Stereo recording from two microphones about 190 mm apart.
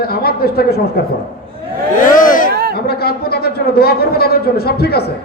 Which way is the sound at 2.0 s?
45° left (ahead or behind).